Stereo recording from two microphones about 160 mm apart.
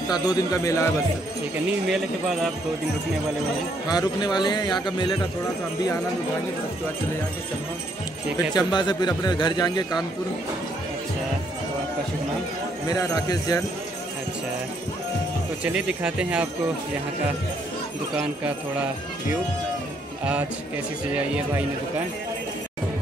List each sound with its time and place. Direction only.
0.1 s a man's voice: 25° left (ahead or behind)
1.9 s speech: centre (ahead or behind)
3.9 s a man's voice: 25° left (ahead or behind)
8.5 s a man's voice: 25° left (ahead or behind)
12.9 s a man's voice: 25° left (ahead or behind)
15.6 s speech: 5° right (ahead or behind)